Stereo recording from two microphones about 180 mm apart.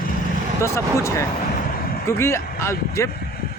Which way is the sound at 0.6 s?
15° left (ahead or behind).